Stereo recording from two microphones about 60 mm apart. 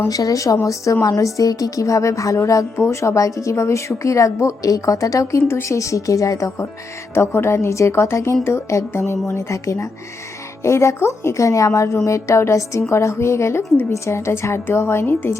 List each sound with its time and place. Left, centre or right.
0.1 s a woman's voice: left
7.1 s a woman's voice: left